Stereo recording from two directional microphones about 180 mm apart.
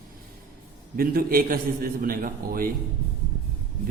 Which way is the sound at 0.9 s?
55° right (ahead or behind).